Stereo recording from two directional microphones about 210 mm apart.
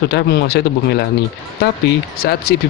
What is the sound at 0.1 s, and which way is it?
Speech, 50° left (ahead or behind).